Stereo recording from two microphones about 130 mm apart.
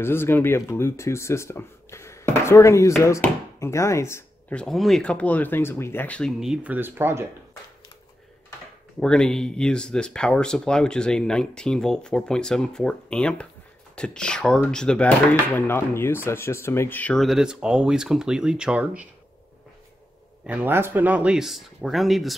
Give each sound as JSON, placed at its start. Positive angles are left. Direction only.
{"t": 0.0, "sound": "speech", "side_deg": 15}
{"t": 4.5, "sound": "speech", "side_deg": 5}
{"t": 6.4, "sound": "speech", "side_deg": -5}
{"t": 9.0, "sound": "speech", "side_deg": 5}
{"t": 17.2, "sound": "speech", "side_deg": -5}
{"t": 20.4, "sound": "speech", "side_deg": -15}